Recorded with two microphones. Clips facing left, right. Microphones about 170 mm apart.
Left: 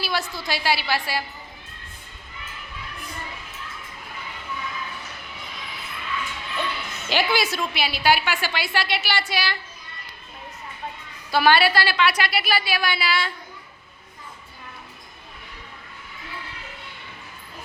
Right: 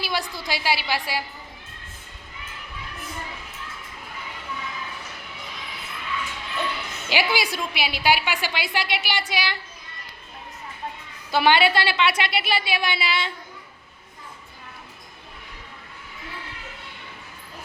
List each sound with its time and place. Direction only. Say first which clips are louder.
0.0 s a woman's voice: left 1 dB; 15° right (ahead or behind)
7.1 s a woman's voice: left 1 dB; 10° right (ahead or behind)
11.3 s a woman's voice: even; 20° right (ahead or behind)